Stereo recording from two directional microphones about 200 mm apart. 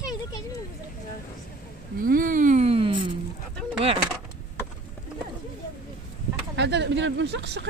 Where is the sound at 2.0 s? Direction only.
45° right (ahead or behind); by 3.1 s 25° right (ahead or behind).